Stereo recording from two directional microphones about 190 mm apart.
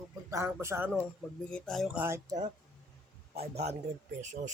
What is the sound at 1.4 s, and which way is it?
Speech, 5° left (ahead or behind).